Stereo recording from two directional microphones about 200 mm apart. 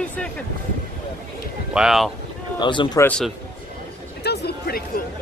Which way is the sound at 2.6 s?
25° left (ahead or behind).